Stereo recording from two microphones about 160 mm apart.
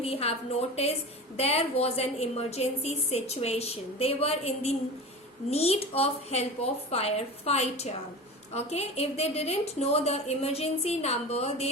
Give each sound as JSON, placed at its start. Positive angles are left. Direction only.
{"t": 0.0, "sound": "a woman's voice", "side_deg": 40}
{"t": 1.4, "sound": "a woman's voice", "side_deg": 40}